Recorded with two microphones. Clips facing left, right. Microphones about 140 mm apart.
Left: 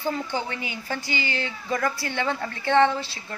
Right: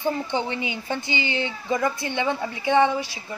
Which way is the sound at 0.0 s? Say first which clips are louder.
Right 3 dB; 20° right (ahead or behind).